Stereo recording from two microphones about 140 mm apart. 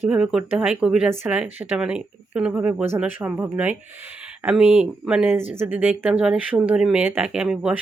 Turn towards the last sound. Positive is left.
turn(degrees=-5)  # may be behind; listen again after turning